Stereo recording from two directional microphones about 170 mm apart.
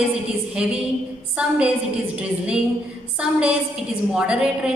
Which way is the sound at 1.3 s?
5° right (ahead or behind).